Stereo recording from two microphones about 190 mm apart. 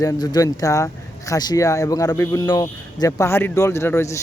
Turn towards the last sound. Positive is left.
turn(degrees=15)  # may be behind; listen again after turning